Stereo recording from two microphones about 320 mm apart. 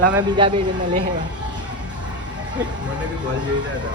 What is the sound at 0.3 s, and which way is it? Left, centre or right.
Speech, centre.